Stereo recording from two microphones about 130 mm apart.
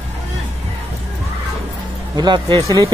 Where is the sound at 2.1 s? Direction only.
35° right (ahead or behind).